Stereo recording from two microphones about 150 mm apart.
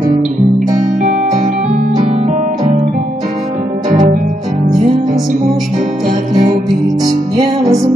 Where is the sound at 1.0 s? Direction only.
50° right (ahead or behind).